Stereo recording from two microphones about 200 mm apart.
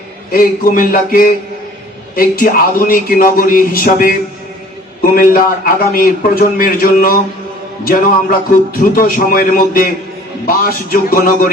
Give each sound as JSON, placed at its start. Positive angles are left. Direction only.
{"t": 0.3, "sound": "a man's voice", "side_deg": 45}